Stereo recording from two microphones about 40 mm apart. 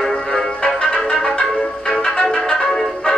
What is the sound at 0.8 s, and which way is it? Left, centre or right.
Music, centre.